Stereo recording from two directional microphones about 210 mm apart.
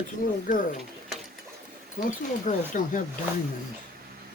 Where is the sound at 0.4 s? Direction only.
40° left (ahead or behind).